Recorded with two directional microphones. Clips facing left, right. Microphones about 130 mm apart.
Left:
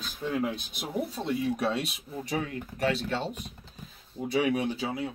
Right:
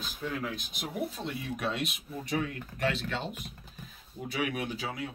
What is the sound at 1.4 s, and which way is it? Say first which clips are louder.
Speech: left 4 dB; 35° left (ahead or behind).